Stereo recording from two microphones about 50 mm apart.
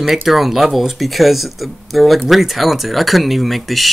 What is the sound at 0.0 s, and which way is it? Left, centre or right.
Speech, centre.